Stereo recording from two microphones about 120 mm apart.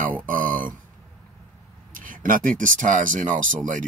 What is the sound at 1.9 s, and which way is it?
Speech, 90° right.